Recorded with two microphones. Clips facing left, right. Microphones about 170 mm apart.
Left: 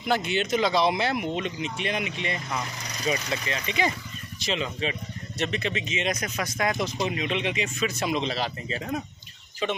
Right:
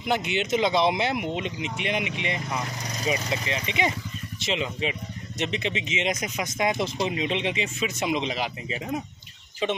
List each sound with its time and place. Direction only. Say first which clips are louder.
0.0 s speech: even; 20° right (ahead or behind)